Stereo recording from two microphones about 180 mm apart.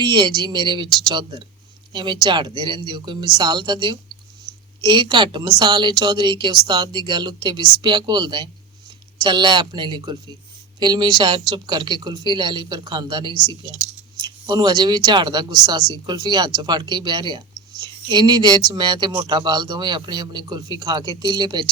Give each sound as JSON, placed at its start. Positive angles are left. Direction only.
{"t": 0.0, "sound": "speech", "side_deg": -25}